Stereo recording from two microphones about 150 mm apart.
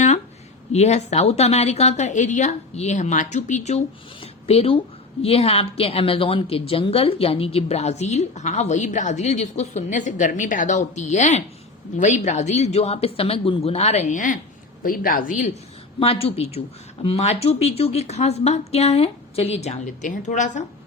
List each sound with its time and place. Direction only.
0.7 s a woman's voice: 45° left (ahead or behind)
14.1 s a woman's voice: 60° left (ahead or behind)
14.8 s a woman's voice: 75° left (ahead or behind)
16.0 s a woman's voice: 40° left (ahead or behind); by 20.7 s 55° left (ahead or behind)